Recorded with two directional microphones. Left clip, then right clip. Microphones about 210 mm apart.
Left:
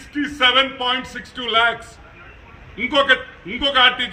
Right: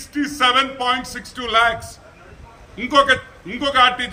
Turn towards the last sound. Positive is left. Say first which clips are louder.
# even
turn(degrees=-10)  # may be behind; listen again after turning